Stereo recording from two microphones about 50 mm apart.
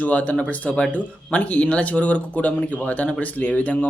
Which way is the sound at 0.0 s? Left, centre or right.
Left.